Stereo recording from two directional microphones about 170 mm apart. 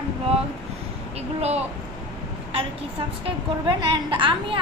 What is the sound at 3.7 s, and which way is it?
Speech, 30° right (ahead or behind).